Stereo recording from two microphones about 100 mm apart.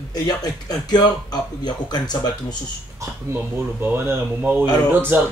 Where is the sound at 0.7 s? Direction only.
40° left (ahead or behind).